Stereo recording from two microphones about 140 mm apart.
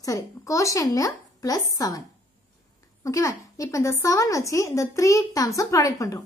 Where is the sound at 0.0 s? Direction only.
25° left (ahead or behind).